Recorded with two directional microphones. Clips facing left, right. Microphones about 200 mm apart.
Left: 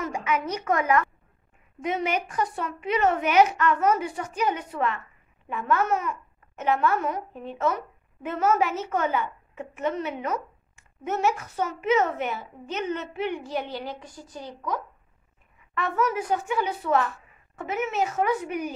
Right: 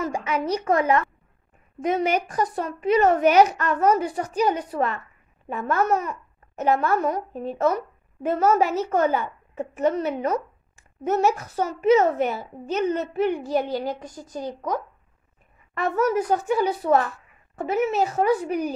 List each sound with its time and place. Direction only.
0.0 s a child's voice: 35° right (ahead or behind)